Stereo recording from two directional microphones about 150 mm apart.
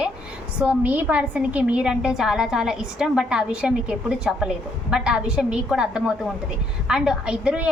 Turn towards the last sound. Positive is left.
turn(degrees=-5)  # may be behind; listen again after turning